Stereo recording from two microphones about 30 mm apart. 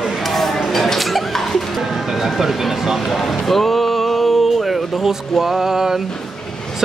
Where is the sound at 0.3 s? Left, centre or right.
Centre.